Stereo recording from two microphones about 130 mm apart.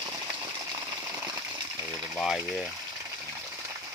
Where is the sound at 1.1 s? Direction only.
20° right (ahead or behind).